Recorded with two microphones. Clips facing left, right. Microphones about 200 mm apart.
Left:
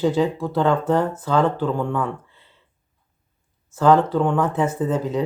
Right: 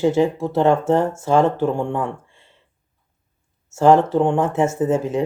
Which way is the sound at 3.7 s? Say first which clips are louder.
Right 2 dB; 25° right (ahead or behind).